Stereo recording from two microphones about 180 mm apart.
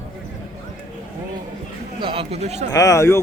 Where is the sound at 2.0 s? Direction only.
30° right (ahead or behind).